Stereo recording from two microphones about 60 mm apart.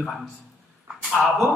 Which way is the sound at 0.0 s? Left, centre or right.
Centre.